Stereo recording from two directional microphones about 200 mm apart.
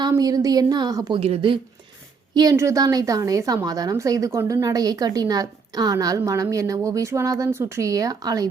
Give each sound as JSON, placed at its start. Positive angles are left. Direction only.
{"t": 0.1, "sound": "a woman's voice", "side_deg": -20}